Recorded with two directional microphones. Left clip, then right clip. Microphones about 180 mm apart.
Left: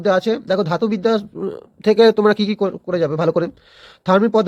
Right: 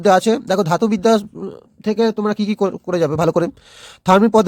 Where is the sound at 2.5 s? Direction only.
35° right (ahead or behind).